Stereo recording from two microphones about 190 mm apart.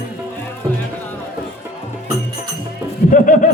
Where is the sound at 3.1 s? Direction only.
45° left (ahead or behind).